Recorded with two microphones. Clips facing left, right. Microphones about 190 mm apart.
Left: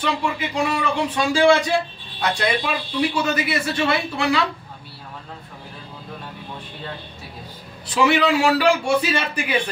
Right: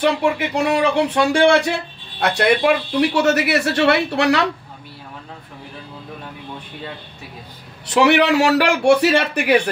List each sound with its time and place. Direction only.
0.0 s speech: 65° right (ahead or behind)
7.8 s speech: 70° right (ahead or behind)